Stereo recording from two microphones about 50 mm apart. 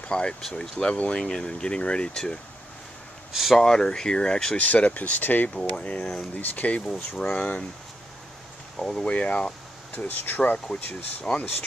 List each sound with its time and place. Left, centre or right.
0.0 s speech: centre
1.2 s speech: centre
3.3 s speech: centre
3.6 s speech: centre
4.6 s speech: left
5.5 s speech: centre
6.4 s speech: left
6.9 s speech: centre
8.7 s speech: centre
9.9 s speech: left
11.3 s speech: centre